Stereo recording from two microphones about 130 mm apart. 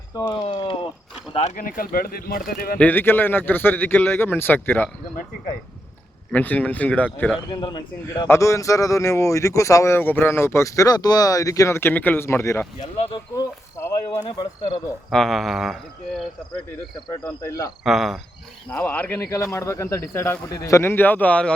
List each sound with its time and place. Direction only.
0.3 s speech: 40° left (ahead or behind)
1.3 s speech: 50° left (ahead or behind)
1.5 s speech: 90° left
2.7 s a man's voice: 15° left (ahead or behind)
6.3 s a man's voice: 10° left (ahead or behind)
7.5 s speech: 35° left (ahead or behind)
8.3 s speech: 20° left (ahead or behind)
12.8 s speech: 45° left (ahead or behind)
13.3 s a sound: 20° left (ahead or behind)
14.3 s speech: 35° left (ahead or behind)
15.1 s a sound: centre (ahead or behind)
17.8 s a sound: centre (ahead or behind)
18.7 s speech: 10° left (ahead or behind)